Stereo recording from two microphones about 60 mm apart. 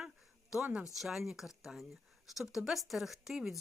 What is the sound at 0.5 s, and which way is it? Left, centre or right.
Speech, centre.